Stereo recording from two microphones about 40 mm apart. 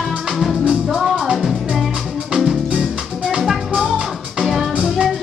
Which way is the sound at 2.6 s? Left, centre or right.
Right.